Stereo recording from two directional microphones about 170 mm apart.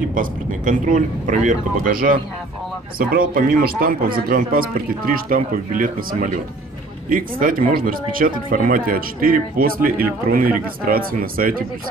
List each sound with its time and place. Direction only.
0.1 s a man's voice: 55° right (ahead or behind)